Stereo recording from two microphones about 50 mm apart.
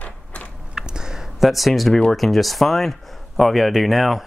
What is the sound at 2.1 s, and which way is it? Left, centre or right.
Speech, centre.